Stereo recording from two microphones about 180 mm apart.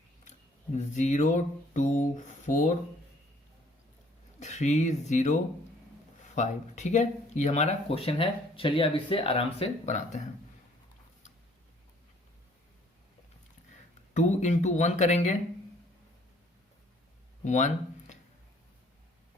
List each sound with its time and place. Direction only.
0.9 s speech: 45° left (ahead or behind)
4.4 s speech: 40° left (ahead or behind)
14.1 s speech: 40° left (ahead or behind)
17.4 s speech: 40° left (ahead or behind)